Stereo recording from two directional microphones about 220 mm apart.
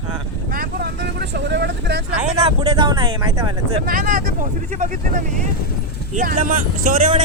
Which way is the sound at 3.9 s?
40° right (ahead or behind).